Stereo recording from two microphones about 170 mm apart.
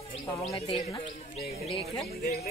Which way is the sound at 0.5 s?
30° left (ahead or behind).